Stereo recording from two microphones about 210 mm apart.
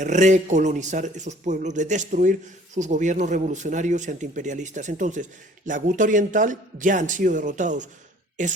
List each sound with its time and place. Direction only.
0.0 s speech: 35° right (ahead or behind)